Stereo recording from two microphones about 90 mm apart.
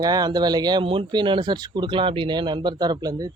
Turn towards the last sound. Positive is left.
turn(degrees=-45)  # may be behind; listen again after turning